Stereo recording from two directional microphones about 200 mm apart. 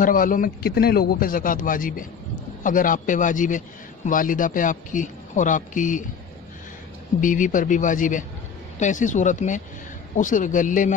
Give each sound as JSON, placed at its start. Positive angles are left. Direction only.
{"t": 0.0, "sound": "a man's voice", "side_deg": 45}
{"t": 7.2, "sound": "speech", "side_deg": 40}